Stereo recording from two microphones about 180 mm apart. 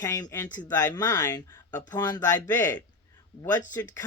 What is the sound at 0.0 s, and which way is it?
Speech, 15° left (ahead or behind).